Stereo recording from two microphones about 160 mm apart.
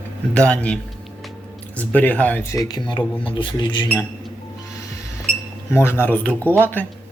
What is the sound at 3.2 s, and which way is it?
Speech, 30° left (ahead or behind).